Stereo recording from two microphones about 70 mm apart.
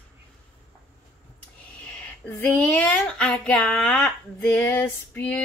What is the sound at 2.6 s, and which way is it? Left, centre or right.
Speech, centre.